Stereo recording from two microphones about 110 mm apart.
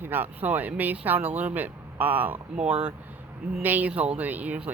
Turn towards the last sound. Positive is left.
turn(degrees=-15)  # may be behind; listen again after turning